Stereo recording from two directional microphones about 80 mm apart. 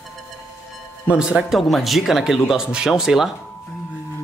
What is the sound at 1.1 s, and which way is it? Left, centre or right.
Speech, centre.